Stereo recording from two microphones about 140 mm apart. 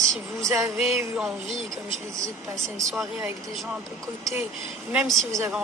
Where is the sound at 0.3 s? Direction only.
20° right (ahead or behind).